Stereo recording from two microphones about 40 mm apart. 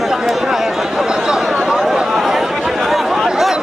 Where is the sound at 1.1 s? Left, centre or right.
Centre.